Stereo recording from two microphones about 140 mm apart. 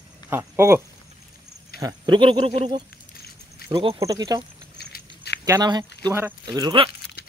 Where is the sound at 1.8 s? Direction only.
35° right (ahead or behind).